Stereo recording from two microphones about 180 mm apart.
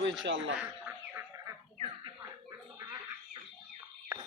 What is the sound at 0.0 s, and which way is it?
Speech, 90° right.